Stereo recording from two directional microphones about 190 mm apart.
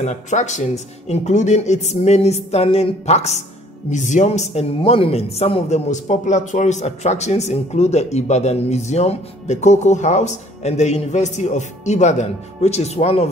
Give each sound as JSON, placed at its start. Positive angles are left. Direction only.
{"t": 0.0, "sound": "speech", "side_deg": 40}